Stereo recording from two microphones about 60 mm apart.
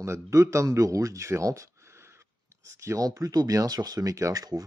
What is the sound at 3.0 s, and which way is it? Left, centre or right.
Speech, right.